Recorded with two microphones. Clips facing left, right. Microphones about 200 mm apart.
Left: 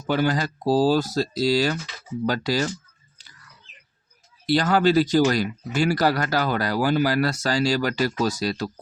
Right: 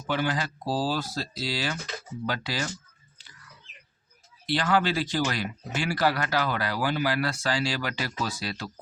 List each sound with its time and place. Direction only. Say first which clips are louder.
0.1 s speech: left 6 dB; 40° left (ahead or behind)
4.4 s speech: left 6 dB; 40° left (ahead or behind)